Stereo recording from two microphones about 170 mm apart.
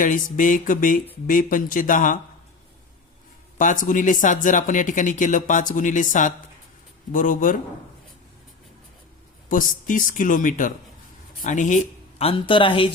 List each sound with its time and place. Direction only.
0.0 s speech: 50° left (ahead or behind)
3.6 s speech: 50° left (ahead or behind)
9.5 s speech: 50° left (ahead or behind)
12.3 s speech: 30° left (ahead or behind)